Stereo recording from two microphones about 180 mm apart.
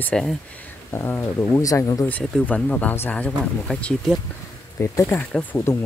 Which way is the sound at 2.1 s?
5° left (ahead or behind).